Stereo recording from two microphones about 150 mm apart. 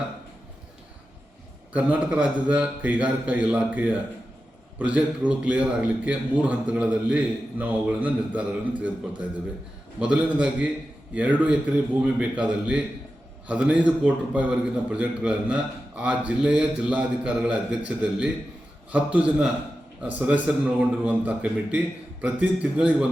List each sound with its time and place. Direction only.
1.7 s a man's voice: 10° right (ahead or behind)
10.0 s a man's voice: 5° right (ahead or behind)